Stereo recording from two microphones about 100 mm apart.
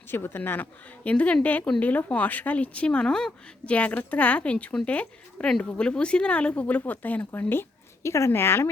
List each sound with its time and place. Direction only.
0.1 s speech: 20° left (ahead or behind)